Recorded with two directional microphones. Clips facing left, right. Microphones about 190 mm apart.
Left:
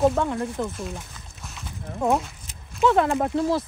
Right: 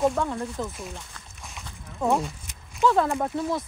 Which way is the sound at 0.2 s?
15° left (ahead or behind).